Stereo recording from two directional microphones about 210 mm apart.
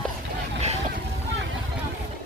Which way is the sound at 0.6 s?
30° right (ahead or behind).